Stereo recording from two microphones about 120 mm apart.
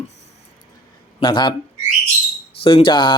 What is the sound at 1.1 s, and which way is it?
Speech, 40° left (ahead or behind).